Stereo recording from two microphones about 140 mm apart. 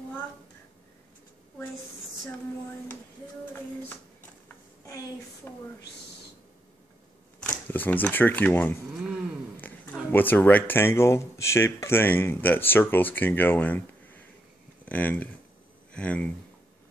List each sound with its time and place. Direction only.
5.4 s speech: 15° left (ahead or behind)
7.4 s speech: 10° left (ahead or behind)
14.9 s speech: 10° left (ahead or behind)